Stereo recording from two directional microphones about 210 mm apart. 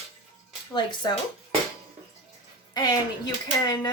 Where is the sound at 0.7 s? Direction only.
20° left (ahead or behind).